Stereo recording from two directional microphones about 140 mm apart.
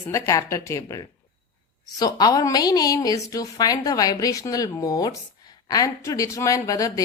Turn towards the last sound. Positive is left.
turn(degrees=25)  # may be behind; listen again after turning